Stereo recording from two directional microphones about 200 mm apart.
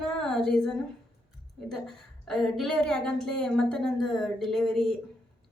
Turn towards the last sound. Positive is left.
turn(degrees=0)  # may be behind; listen again after turning